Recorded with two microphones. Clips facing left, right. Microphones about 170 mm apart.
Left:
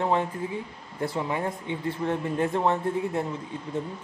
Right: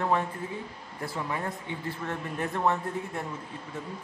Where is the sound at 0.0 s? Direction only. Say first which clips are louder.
Left 3 dB; 25° left (ahead or behind).